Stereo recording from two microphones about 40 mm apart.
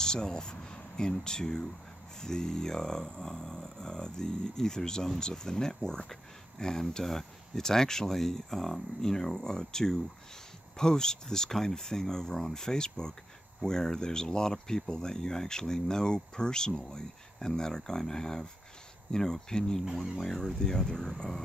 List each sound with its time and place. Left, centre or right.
0.0 s speech: centre